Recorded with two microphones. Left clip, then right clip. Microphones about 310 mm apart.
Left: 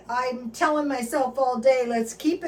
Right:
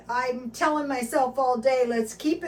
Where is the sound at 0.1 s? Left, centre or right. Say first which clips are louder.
Even; centre.